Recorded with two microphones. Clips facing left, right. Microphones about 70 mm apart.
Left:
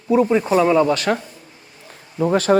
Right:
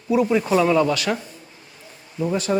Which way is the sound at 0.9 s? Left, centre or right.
Left.